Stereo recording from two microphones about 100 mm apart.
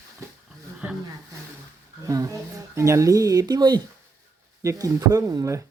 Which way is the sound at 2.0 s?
30° right (ahead or behind).